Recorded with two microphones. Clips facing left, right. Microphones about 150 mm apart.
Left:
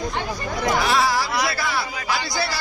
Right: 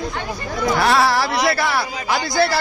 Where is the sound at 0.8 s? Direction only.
65° right (ahead or behind).